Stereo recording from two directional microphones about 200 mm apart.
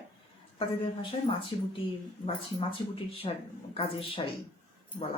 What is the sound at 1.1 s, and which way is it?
A man's voice, 25° left (ahead or behind).